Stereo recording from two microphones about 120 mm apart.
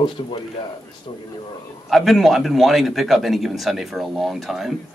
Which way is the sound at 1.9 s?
Centre (ahead or behind).